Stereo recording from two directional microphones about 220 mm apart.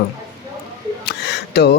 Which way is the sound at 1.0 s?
45° left (ahead or behind).